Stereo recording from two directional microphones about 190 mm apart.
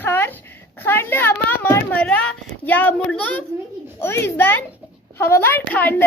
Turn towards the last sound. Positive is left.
turn(degrees=10)  # may be behind; listen again after turning